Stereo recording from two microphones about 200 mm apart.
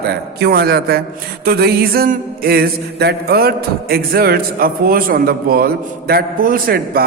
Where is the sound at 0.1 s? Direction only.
50° right (ahead or behind).